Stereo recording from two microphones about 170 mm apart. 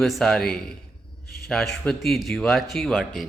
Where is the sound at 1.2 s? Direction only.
65° left (ahead or behind).